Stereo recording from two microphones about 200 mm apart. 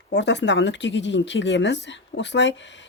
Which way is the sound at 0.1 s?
60° left (ahead or behind).